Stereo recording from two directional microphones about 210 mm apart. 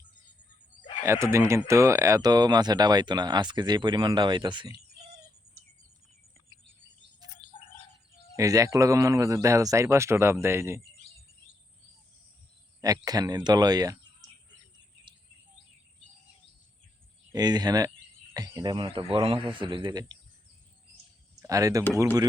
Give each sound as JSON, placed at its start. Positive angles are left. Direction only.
{"t": 1.0, "sound": "speech", "side_deg": -15}
{"t": 7.5, "sound": "bird", "side_deg": 25}
{"t": 8.4, "sound": "a man's voice", "side_deg": -15}
{"t": 12.8, "sound": "a man's voice", "side_deg": -15}
{"t": 17.3, "sound": "speech", "side_deg": -20}
{"t": 21.3, "sound": "a man's voice", "side_deg": -15}